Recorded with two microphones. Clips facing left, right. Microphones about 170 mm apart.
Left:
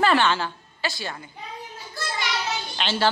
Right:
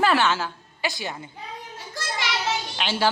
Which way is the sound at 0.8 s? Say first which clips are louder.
Right 1 dB; 20° right (ahead or behind).